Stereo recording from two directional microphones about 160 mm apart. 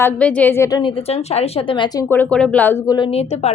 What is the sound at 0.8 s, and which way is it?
A woman's voice, 35° left (ahead or behind).